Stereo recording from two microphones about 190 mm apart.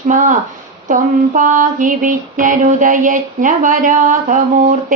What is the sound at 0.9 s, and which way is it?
Speech, 45° right (ahead or behind).